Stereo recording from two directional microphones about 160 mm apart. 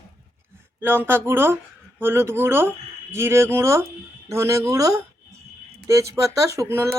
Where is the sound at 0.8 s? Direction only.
15° right (ahead or behind).